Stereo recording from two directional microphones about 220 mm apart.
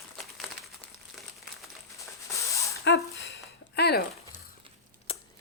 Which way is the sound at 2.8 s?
50° left (ahead or behind).